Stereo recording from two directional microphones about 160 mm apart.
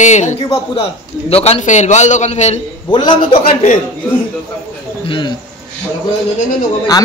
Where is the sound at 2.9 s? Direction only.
30° left (ahead or behind).